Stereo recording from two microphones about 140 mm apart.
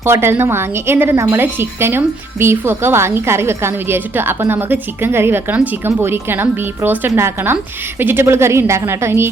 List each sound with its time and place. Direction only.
0.0 s speech: 15° right (ahead or behind)